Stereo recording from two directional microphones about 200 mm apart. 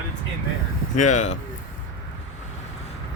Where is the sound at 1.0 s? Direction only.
35° left (ahead or behind).